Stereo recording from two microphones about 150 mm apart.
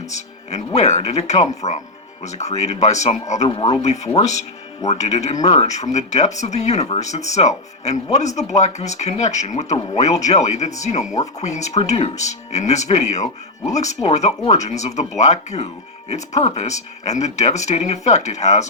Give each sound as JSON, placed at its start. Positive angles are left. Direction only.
{"t": 0.1, "sound": "speech", "side_deg": 50}
{"t": 3.5, "sound": "speech", "side_deg": 35}
{"t": 3.8, "sound": "speech", "side_deg": 50}